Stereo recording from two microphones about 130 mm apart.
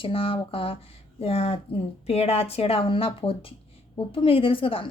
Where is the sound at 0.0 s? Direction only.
45° left (ahead or behind).